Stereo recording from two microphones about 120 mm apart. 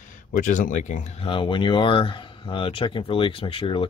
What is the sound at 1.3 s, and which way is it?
Speech, 40° left (ahead or behind).